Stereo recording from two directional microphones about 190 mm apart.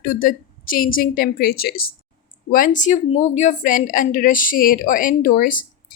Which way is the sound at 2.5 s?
45° left (ahead or behind).